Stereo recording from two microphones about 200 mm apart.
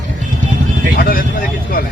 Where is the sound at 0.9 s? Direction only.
50° left (ahead or behind).